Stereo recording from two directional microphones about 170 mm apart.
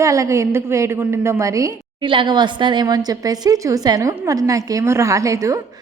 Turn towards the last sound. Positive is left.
turn(degrees=-20)  # may be behind; listen again after turning